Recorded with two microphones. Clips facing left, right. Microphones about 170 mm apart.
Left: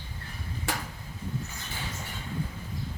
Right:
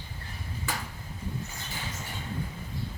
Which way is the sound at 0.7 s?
85° left.